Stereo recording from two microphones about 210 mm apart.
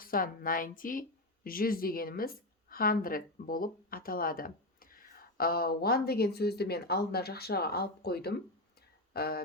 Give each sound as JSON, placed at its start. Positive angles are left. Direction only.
{"t": 0.0, "sound": "a woman's voice", "side_deg": 45}